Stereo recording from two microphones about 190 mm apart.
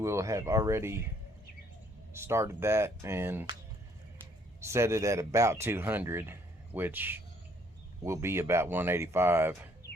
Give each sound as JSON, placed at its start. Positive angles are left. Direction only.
{"t": 0.0, "sound": "speech", "side_deg": -15}
{"t": 2.1, "sound": "speech", "side_deg": -15}
{"t": 4.6, "sound": "speech", "side_deg": -15}